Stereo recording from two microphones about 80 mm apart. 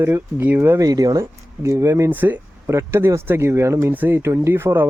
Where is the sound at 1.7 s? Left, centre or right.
Right.